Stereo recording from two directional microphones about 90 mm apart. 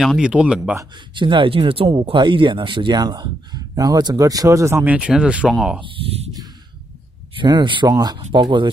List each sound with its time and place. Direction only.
0.0 s speech: centre (ahead or behind)
0.3 s speech: 10° right (ahead or behind)
0.9 s speech: 65° right (ahead or behind); by 4.8 s 35° right (ahead or behind)
4.8 s speech: 10° right (ahead or behind)
5.8 s speech: 70° right (ahead or behind)
7.3 s speech: 60° right (ahead or behind)
7.9 s speech: 50° right (ahead or behind)